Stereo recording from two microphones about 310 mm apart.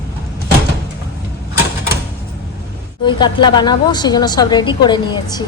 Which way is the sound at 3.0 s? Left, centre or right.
Centre.